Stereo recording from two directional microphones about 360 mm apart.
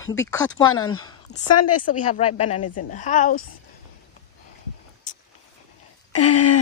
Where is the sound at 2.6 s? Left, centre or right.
Left.